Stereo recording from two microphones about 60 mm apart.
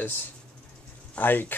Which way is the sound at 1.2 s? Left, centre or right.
Left.